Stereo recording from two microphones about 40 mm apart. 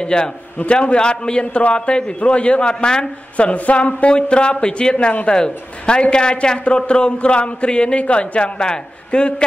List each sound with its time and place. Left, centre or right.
0.0 s a man's voice: left
3.3 s a man's voice: left